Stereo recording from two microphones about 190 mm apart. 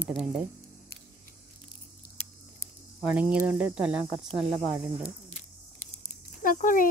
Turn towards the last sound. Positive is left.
turn(degrees=45)  # may be behind; listen again after turning